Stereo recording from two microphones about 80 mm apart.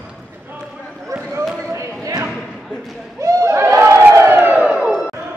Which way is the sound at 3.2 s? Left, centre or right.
Right.